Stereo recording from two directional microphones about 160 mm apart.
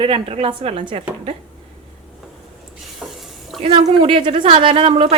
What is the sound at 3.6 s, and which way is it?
A woman's voice, 35° right (ahead or behind).